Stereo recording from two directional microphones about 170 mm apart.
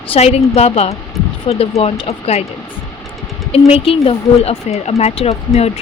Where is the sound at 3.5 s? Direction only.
35° left (ahead or behind).